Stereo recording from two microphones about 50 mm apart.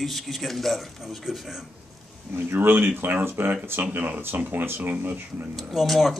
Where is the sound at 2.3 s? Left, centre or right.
Right.